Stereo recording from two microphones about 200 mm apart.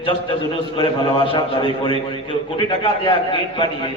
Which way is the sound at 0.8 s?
25° left (ahead or behind).